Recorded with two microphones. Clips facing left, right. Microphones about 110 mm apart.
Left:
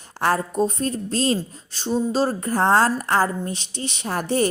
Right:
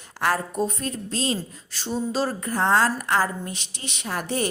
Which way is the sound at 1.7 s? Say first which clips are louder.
Left 5 dB; 25° left (ahead or behind).